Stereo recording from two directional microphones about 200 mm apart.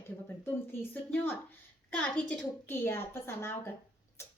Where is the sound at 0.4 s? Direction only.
10° left (ahead or behind).